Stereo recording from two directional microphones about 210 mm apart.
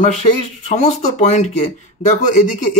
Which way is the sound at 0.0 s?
35° left (ahead or behind).